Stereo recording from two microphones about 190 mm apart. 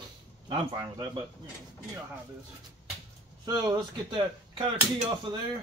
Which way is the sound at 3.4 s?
20° right (ahead or behind).